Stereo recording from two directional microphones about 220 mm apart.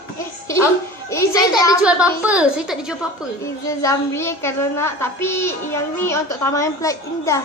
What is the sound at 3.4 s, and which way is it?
A woman's voice, 15° left (ahead or behind).